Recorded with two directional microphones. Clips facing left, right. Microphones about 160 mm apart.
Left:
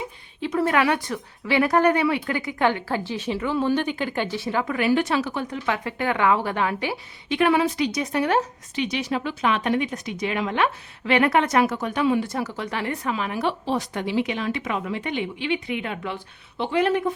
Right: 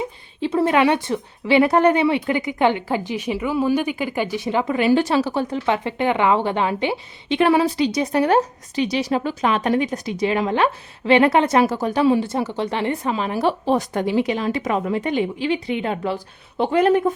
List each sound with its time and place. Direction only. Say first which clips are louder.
0.4 s speech: right 4 dB; 30° right (ahead or behind)